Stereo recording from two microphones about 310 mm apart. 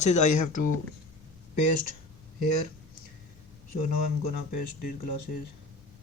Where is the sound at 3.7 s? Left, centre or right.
Left.